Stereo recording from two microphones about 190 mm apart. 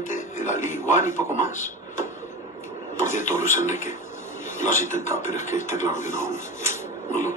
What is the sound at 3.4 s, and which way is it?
Speech, 40° left (ahead or behind).